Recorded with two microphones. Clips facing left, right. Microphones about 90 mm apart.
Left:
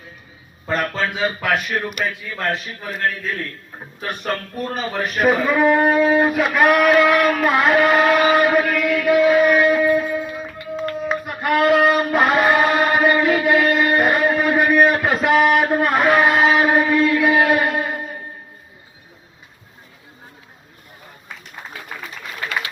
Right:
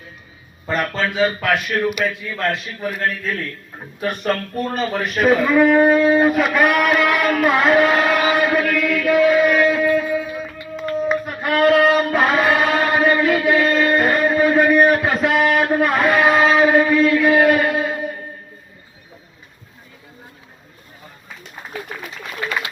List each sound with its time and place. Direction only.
0.7 s speech: 5° left (ahead or behind)
9.2 s music: 10° left (ahead or behind)
13.1 s a sound: 15° left (ahead or behind); by 18.0 s centre (ahead or behind)